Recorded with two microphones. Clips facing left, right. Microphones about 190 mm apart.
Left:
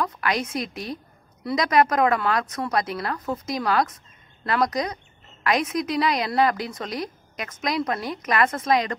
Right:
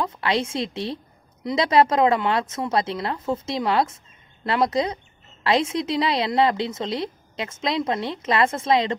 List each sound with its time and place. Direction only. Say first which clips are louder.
0.0 s a woman's voice: right 2 dB; 25° right (ahead or behind)